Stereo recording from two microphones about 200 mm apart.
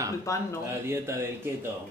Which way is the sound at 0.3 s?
15° left (ahead or behind).